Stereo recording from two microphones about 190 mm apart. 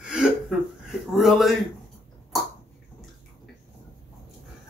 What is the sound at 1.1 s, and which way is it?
Speech, centre (ahead or behind).